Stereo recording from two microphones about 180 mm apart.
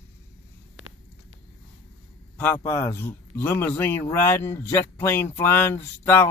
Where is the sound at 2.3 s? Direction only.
10° left (ahead or behind).